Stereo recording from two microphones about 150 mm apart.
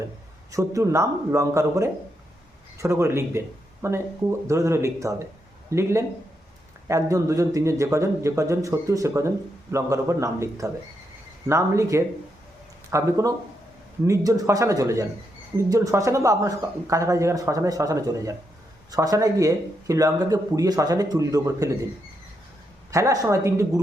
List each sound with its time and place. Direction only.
0.5 s speech: 20° right (ahead or behind)
22.9 s speech: 20° right (ahead or behind)